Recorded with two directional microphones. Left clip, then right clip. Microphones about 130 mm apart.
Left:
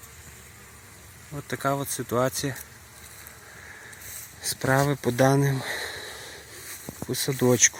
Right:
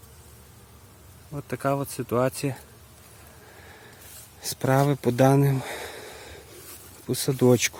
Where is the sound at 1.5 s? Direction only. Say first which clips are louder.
Even; 15° right (ahead or behind).